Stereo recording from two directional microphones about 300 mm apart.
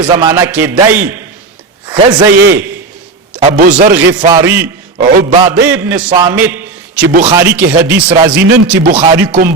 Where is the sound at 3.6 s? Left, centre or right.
Right.